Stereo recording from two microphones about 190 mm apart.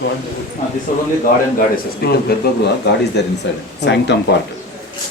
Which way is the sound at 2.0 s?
55° left (ahead or behind).